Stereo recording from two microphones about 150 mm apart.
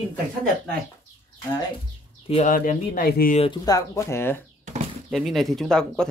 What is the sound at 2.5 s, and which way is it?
Speech, 65° left (ahead or behind).